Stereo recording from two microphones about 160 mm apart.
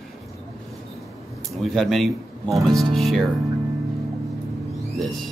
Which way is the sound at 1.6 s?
Centre (ahead or behind).